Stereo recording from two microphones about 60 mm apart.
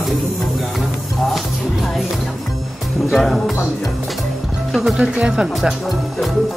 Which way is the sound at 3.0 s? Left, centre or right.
Centre.